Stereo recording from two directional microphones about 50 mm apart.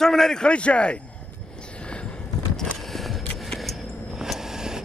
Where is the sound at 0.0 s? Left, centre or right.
Centre.